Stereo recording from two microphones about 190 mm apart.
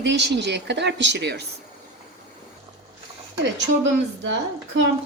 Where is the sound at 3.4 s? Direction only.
70° right (ahead or behind).